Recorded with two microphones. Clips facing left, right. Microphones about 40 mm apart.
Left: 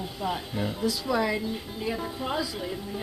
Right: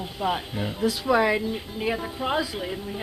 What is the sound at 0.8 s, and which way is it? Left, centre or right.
A woman's voice, right.